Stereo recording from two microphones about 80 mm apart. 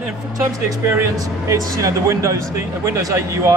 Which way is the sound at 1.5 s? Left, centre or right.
Right.